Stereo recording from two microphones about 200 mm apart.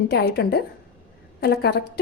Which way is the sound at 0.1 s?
55° left (ahead or behind).